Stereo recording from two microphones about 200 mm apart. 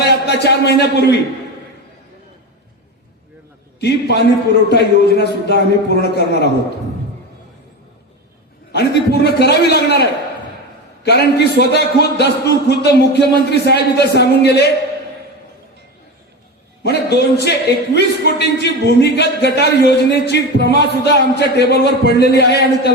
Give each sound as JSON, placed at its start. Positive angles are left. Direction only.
{"t": 0.0, "sound": "a sound", "side_deg": 55}
{"t": 0.8, "sound": "a man's voice", "side_deg": 60}
{"t": 3.8, "sound": "a man's voice", "side_deg": 55}
{"t": 8.7, "sound": "a man's voice", "side_deg": 55}
{"t": 16.8, "sound": "a man's voice", "side_deg": 55}